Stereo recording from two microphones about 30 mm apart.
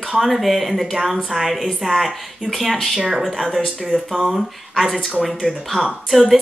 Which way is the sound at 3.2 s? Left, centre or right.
Centre.